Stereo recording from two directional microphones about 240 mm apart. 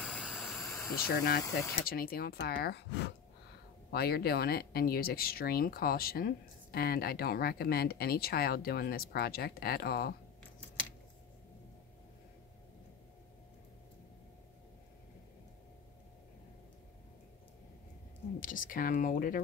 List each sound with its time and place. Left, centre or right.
0.0 s a sound: centre
0.6 s vehicle: centre
1.0 s speech: left
18.4 s speech: left